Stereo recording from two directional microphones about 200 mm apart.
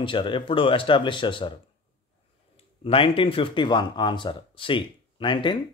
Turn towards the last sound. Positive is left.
turn(degrees=25)  # may be behind; listen again after turning